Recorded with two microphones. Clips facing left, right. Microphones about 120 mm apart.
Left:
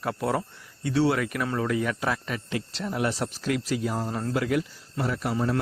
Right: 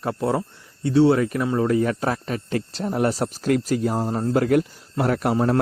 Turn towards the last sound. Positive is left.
turn(degrees=-60)  # may be behind; listen again after turning